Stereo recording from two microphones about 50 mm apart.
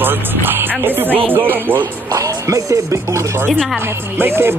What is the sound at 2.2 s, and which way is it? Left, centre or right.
Speech, right.